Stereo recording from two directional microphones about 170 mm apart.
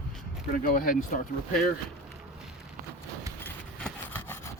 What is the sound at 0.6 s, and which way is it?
Speech, 55° left (ahead or behind).